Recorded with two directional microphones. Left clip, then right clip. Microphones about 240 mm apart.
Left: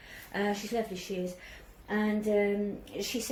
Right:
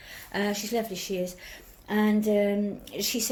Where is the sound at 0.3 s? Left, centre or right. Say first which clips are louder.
Right 3 dB; right.